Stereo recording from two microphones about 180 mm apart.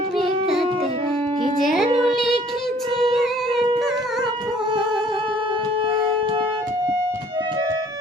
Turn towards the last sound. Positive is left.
turn(degrees=-25)  # may be behind; listen again after turning